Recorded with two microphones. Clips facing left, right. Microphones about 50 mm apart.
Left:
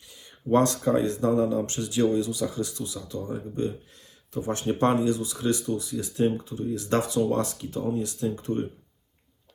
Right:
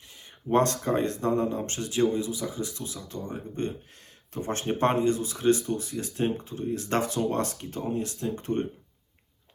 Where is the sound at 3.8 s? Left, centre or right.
Right.